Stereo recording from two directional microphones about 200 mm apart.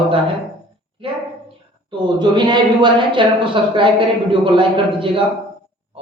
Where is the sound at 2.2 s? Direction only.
20° right (ahead or behind).